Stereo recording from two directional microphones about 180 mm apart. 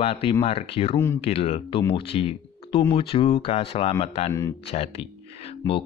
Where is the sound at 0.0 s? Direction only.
30° left (ahead or behind).